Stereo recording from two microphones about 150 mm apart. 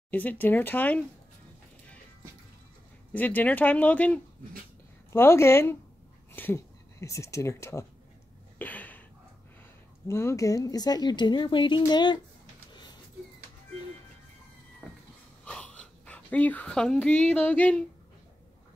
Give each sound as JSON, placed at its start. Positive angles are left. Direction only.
{"t": 0.1, "sound": "speech", "side_deg": 10}
{"t": 3.1, "sound": "speech", "side_deg": 10}
{"t": 8.5, "sound": "a sound", "side_deg": 10}
{"t": 10.0, "sound": "speech", "side_deg": 20}
{"t": 15.4, "sound": "speech", "side_deg": 10}